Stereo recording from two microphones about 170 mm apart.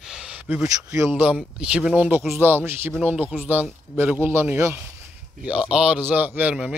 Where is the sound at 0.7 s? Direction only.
20° right (ahead or behind).